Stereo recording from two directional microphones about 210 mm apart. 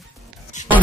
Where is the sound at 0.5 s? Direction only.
35° left (ahead or behind).